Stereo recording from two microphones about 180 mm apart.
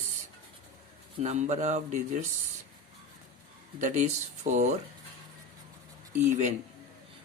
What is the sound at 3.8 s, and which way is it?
Speech, 40° right (ahead or behind).